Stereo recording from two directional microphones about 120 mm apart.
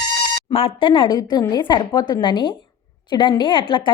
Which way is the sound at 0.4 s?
50° left (ahead or behind).